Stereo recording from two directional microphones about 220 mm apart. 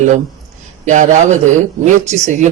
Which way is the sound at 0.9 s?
35° right (ahead or behind).